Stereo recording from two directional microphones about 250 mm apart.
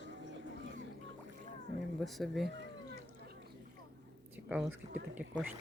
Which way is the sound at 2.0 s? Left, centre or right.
Centre.